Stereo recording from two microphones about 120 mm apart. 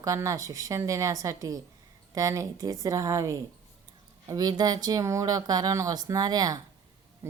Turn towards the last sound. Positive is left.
turn(degrees=-30)  # may be behind; listen again after turning